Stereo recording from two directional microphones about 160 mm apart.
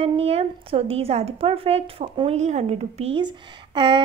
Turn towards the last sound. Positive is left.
turn(degrees=-30)  # may be behind; listen again after turning